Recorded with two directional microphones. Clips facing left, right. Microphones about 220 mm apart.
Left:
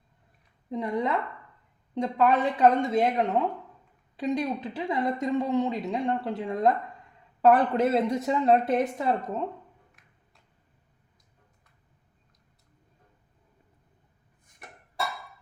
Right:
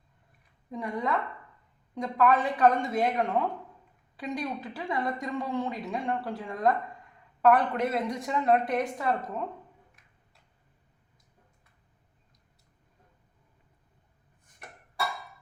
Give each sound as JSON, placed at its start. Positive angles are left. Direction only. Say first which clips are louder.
{"t": 0.7, "sound": "speech", "louder": "left 3 dB", "side_deg": 20}